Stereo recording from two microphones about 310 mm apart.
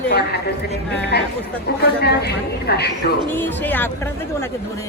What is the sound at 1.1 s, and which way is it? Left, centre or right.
A woman's voice, left.